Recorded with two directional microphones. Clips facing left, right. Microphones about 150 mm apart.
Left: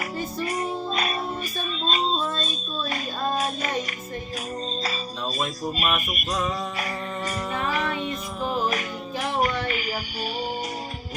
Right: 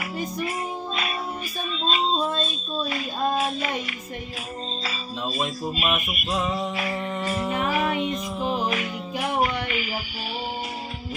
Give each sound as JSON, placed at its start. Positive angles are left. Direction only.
{"t": 1.8, "sound": "female singing", "side_deg": 40}
{"t": 2.4, "sound": "child singing", "side_deg": 40}
{"t": 5.7, "sound": "music", "side_deg": 45}
{"t": 7.4, "sound": "music", "side_deg": -15}
{"t": 9.6, "sound": "a sound", "side_deg": 40}